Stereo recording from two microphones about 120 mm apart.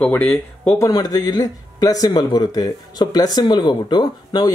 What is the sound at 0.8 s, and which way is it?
Speech, 30° left (ahead or behind).